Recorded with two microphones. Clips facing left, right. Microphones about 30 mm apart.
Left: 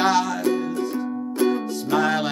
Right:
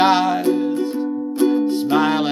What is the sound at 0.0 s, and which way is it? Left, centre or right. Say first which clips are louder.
Music: right 5 dB; right.